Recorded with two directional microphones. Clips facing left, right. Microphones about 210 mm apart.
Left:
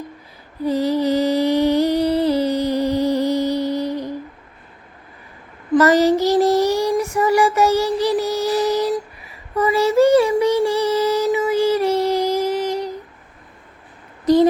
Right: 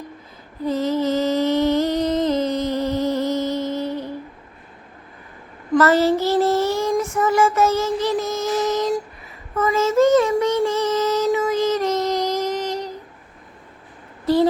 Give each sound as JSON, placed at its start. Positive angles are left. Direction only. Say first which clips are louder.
{"t": 0.6, "sound": "humming", "louder": "left 2 dB", "side_deg": 15}
{"t": 5.8, "sound": "child singing", "louder": "left 2 dB", "side_deg": 15}
{"t": 14.3, "sound": "a sound", "louder": "left 4 dB", "side_deg": 15}